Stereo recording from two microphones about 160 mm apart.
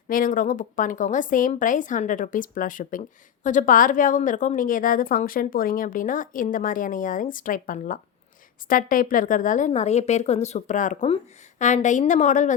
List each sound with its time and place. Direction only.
0.1 s a woman's voice: 60° left (ahead or behind)